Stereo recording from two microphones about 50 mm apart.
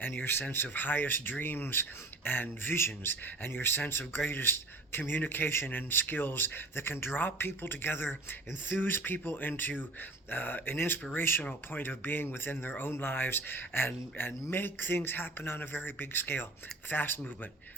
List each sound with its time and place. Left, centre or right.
0.0 s speech: left